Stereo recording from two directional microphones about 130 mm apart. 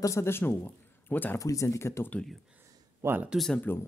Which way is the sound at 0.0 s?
20° left (ahead or behind).